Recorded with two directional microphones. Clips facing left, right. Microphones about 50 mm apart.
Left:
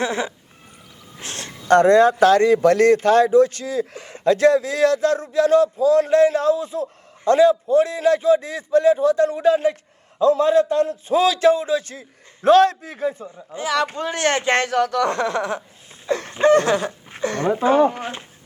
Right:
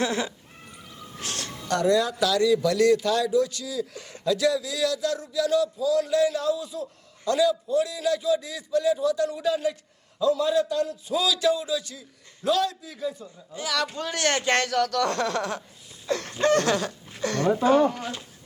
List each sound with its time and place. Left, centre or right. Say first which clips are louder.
0.0 s speech: left 3 dB; left
1.2 s a sound: left 1 dB; left
1.6 s a man's voice: left 10 dB; left